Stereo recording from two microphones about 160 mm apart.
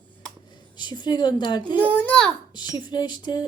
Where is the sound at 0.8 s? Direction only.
25° left (ahead or behind).